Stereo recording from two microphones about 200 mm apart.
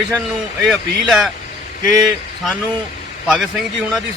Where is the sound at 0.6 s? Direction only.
Centre (ahead or behind).